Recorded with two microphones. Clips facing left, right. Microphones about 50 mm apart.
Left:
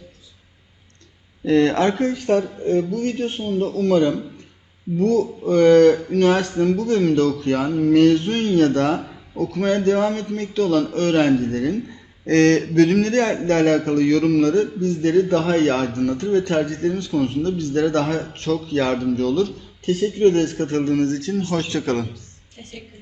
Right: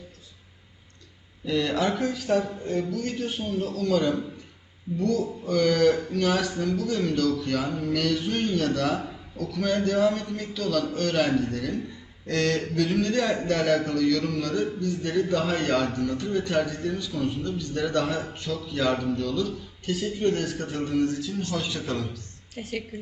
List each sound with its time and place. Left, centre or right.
1.5 s a man's voice: left
4.9 s a man's voice: left
12.2 s a man's voice: left
16.0 s a man's voice: left
22.6 s a woman's voice: right